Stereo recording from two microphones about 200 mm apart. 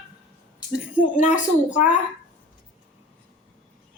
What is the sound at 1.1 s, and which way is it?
Speech, 40° left (ahead or behind).